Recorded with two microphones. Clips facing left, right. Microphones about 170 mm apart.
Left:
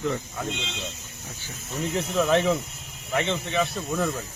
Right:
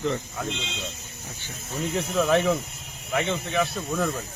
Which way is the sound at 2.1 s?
Centre (ahead or behind).